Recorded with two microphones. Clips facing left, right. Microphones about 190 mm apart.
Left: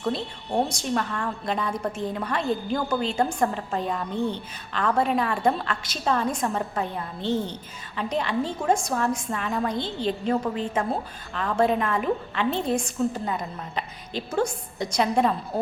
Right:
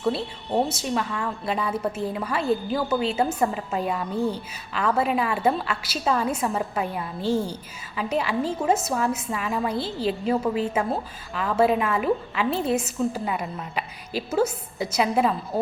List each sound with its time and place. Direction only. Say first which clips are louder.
0.0 s a woman's voice: right 2 dB; 5° right (ahead or behind)